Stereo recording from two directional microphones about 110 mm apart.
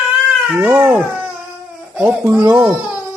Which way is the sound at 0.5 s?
20° right (ahead or behind).